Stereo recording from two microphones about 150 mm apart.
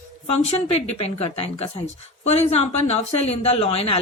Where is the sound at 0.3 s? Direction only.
45° left (ahead or behind).